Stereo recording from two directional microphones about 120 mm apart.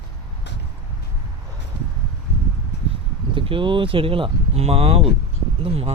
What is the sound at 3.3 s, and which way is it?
Speech, 45° right (ahead or behind).